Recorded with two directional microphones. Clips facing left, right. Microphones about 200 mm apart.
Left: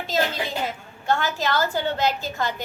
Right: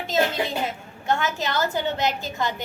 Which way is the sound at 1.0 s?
20° right (ahead or behind).